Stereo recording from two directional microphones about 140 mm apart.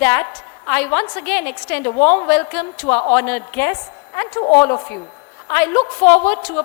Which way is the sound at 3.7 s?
20° left (ahead or behind).